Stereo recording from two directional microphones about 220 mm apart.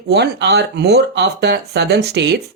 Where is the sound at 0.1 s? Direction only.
50° right (ahead or behind).